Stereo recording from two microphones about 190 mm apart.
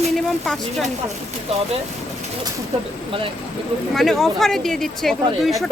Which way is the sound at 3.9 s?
Centre (ahead or behind).